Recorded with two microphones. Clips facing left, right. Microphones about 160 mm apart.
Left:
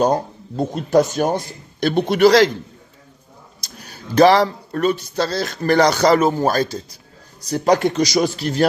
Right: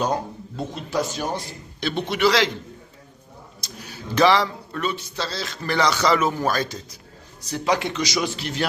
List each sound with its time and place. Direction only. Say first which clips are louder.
0.0 s speech: left 7 dB; 45° left (ahead or behind)
3.6 s speech: even; 40° left (ahead or behind)